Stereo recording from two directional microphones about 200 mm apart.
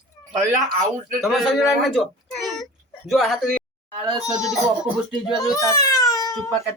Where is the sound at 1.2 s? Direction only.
Centre (ahead or behind).